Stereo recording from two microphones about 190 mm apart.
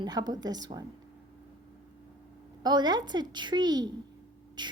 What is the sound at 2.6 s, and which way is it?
A woman's voice, 20° right (ahead or behind).